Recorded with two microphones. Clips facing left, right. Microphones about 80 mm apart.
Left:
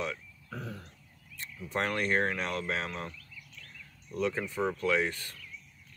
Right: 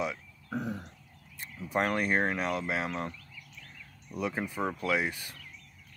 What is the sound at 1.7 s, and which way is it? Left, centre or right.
Speech, centre.